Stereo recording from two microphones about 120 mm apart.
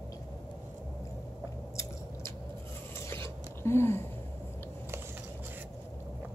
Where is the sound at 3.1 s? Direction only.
20° left (ahead or behind).